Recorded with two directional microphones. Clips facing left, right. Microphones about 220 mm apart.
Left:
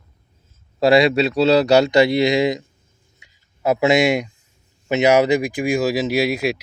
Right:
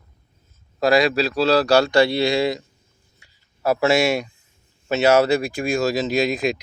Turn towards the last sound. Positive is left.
turn(degrees=10)  # may be behind; listen again after turning